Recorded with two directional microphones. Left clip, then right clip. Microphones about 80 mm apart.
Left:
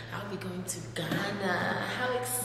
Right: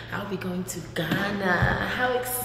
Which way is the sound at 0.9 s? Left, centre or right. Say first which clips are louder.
Right 6 dB; centre.